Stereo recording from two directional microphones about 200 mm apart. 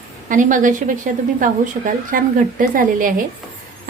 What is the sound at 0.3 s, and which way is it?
A woman's voice, 40° right (ahead or behind).